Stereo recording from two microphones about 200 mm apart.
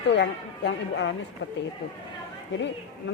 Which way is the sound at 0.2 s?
60° left (ahead or behind).